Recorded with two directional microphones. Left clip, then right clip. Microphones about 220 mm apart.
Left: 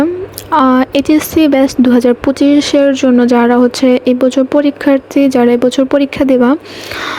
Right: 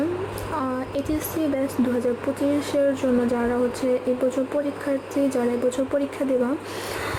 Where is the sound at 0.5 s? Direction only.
35° left (ahead or behind).